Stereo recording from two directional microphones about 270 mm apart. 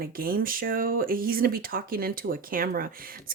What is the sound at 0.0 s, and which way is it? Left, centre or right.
Speech, right.